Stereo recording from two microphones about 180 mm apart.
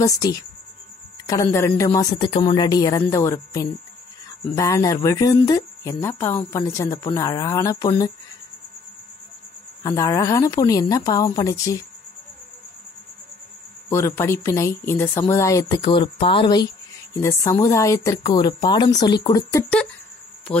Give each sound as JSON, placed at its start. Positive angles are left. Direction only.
{"t": 0.0, "sound": "speech", "side_deg": 20}
{"t": 9.8, "sound": "speech", "side_deg": 20}
{"t": 13.8, "sound": "speech", "side_deg": 15}
{"t": 17.2, "sound": "speech", "side_deg": 10}